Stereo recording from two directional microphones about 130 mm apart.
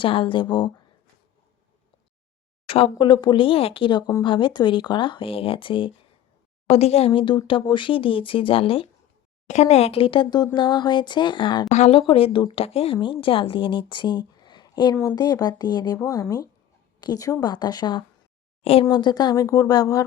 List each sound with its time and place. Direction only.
0.0 s speech: 40° left (ahead or behind)
2.6 s a sound: 45° left (ahead or behind)
2.9 s speech: 35° left (ahead or behind)
6.7 s speech: 50° left (ahead or behind)
9.5 s speech: 55° left (ahead or behind); by 11.7 s 35° left (ahead or behind)
11.7 s speech: 60° left (ahead or behind)
11.9 s speech: 45° left (ahead or behind)
17.0 s speech: 30° left (ahead or behind)
18.6 s speech: 50° left (ahead or behind)
18.9 s speech: 35° left (ahead or behind)